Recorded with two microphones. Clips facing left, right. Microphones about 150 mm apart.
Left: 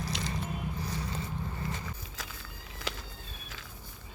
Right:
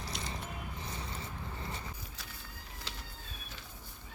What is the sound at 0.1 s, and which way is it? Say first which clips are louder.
Music: left 5 dB; 90° left.